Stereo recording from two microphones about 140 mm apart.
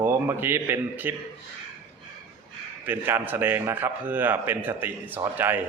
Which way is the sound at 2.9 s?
15° right (ahead or behind).